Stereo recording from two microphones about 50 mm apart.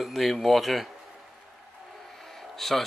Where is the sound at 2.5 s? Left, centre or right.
Centre.